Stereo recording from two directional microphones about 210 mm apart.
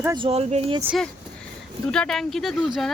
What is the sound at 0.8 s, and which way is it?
Speech, centre (ahead or behind).